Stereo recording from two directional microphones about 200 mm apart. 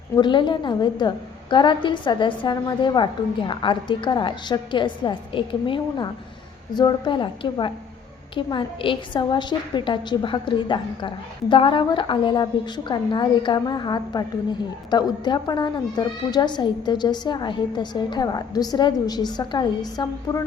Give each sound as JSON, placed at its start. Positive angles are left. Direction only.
{"t": 0.2, "sound": "a woman's voice", "side_deg": 25}